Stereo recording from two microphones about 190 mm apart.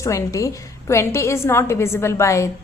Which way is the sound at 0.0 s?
15° left (ahead or behind).